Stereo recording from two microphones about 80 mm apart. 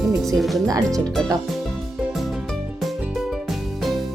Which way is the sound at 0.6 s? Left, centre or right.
Right.